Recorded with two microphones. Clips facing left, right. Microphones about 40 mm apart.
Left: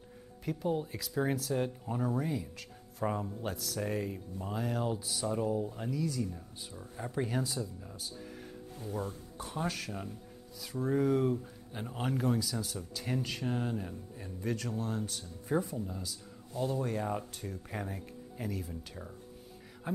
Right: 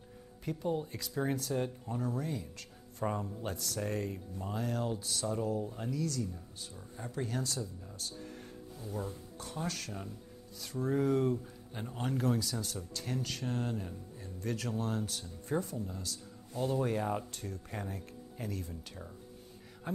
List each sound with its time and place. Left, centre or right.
0.5 s speech: centre
16.8 s speech: centre
17.3 s speech: centre